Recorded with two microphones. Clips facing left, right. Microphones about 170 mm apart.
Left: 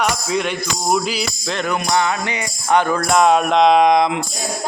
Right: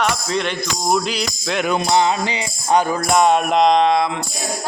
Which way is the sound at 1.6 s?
25° right (ahead or behind).